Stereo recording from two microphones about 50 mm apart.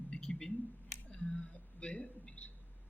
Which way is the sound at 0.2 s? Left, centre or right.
Centre.